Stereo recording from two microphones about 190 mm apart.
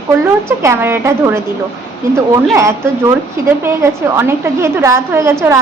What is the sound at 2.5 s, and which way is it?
A woman's voice, 15° right (ahead or behind).